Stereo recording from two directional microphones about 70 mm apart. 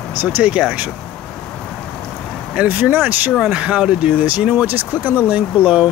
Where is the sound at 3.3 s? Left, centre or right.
Centre.